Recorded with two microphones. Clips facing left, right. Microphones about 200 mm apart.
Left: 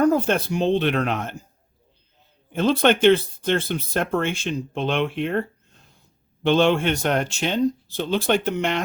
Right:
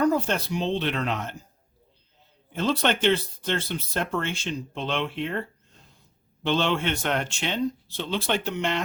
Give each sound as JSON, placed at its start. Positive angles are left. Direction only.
{"t": 0.0, "sound": "speech", "side_deg": 50}
{"t": 2.5, "sound": "speech", "side_deg": 55}